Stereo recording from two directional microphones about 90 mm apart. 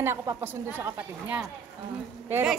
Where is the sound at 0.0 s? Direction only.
25° right (ahead or behind).